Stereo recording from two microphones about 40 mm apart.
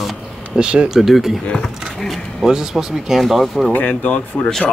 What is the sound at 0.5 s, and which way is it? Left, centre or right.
Speech, right.